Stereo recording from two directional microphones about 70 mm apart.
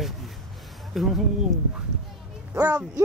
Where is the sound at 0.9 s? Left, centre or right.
Centre.